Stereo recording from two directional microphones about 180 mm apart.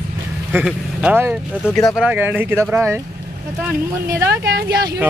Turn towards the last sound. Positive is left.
turn(degrees=-20)  # may be behind; listen again after turning